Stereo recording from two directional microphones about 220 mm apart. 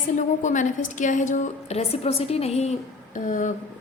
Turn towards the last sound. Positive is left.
turn(degrees=35)  # may be behind; listen again after turning